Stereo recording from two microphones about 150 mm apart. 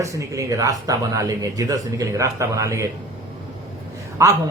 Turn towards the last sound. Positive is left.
turn(degrees=-20)  # may be behind; listen again after turning